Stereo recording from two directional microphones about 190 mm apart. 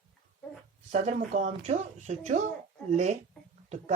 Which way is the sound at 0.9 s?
40° right (ahead or behind).